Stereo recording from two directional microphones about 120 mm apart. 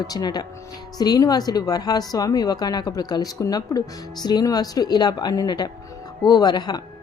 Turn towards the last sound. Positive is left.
turn(degrees=35)  # may be behind; listen again after turning